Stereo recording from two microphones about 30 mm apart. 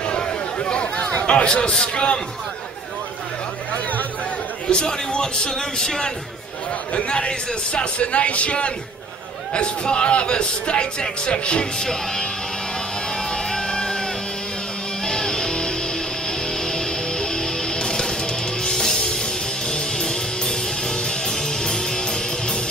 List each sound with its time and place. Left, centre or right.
0.0 s a sound: left
0.7 s a man's voice: left
4.6 s a man's voice: left
7.1 s a man's voice: left
11.8 s a man's voice: centre
13.1 s music: left